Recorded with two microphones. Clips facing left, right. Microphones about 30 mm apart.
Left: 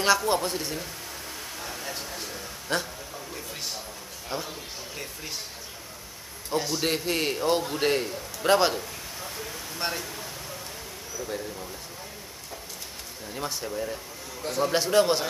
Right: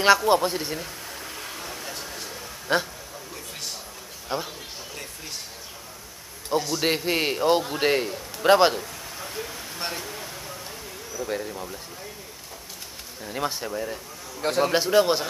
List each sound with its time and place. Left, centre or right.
0.0 s a man's voice: centre
1.6 s a sound: centre
2.7 s speech: centre
4.3 s speech: centre
6.8 s a man's voice: centre
9.8 s a sound: centre
11.2 s speech: centre
13.2 s speech: right
14.4 s a man's voice: right
14.7 s a man's voice: centre